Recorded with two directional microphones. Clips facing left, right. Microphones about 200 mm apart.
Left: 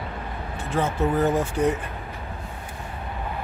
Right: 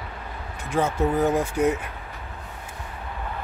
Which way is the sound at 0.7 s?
10° right (ahead or behind).